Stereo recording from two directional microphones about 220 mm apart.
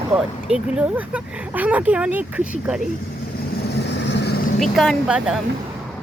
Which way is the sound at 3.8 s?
55° left (ahead or behind).